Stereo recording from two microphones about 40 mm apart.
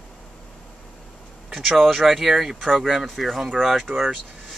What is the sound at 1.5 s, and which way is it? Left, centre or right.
Speech, centre.